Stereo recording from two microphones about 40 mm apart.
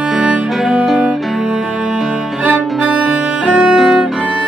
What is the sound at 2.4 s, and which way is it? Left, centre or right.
Music, right.